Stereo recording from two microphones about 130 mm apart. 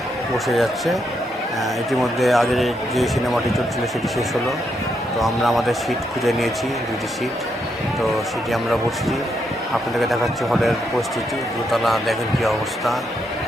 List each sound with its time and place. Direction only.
0.4 s a man's voice: centre (ahead or behind)
5.2 s a man's voice: centre (ahead or behind)
10.0 s a man's voice: centre (ahead or behind)